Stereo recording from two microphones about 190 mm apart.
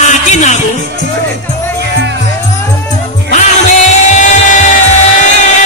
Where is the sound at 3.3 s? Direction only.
40° left (ahead or behind).